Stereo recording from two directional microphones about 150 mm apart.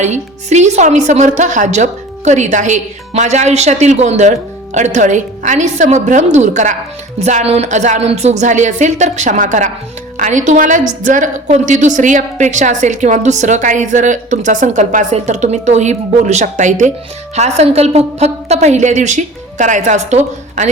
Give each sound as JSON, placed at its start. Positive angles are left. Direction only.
{"t": 0.0, "sound": "a woman's voice", "side_deg": -50}